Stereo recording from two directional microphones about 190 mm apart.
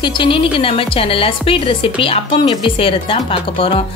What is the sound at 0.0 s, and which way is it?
A woman's voice, 25° left (ahead or behind).